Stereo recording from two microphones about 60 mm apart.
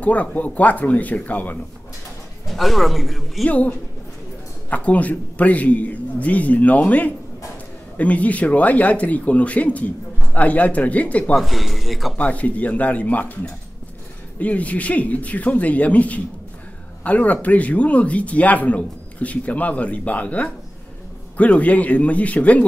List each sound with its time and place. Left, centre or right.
0.0 s speech: left
2.4 s speech: centre
3.4 s speech: left
11.3 s speech: centre
12.2 s speech: left
14.4 s speech: left